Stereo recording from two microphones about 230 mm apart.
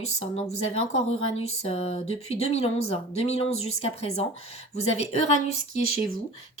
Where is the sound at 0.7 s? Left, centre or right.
Left.